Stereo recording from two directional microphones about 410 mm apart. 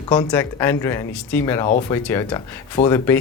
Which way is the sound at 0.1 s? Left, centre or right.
Centre.